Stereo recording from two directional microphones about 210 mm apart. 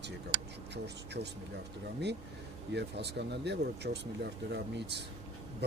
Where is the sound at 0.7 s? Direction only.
55° right (ahead or behind).